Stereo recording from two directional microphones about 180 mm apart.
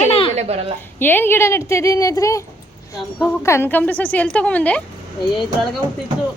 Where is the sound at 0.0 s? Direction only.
35° left (ahead or behind).